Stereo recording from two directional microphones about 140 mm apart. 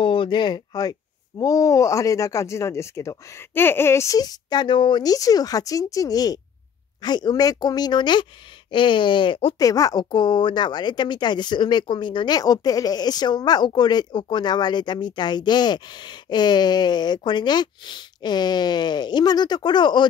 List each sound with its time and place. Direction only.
0.0 s speech: 35° left (ahead or behind)
9.6 s speech: 25° left (ahead or behind)